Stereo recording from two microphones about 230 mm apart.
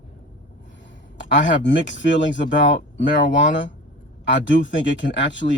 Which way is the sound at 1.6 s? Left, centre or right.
Left.